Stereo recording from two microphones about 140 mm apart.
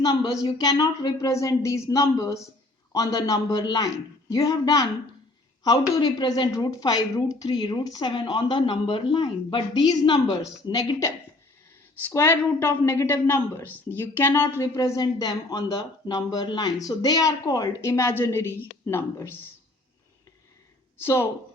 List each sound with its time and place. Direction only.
0.0 s a woman's voice: 25° left (ahead or behind)
12.0 s a woman's voice: 20° left (ahead or behind)
21.0 s speech: 15° left (ahead or behind)